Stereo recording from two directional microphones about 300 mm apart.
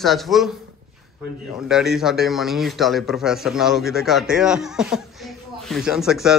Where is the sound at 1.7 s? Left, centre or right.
Centre.